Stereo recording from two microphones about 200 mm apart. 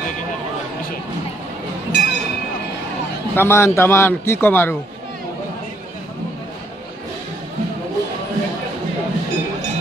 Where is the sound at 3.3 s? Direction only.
10° left (ahead or behind).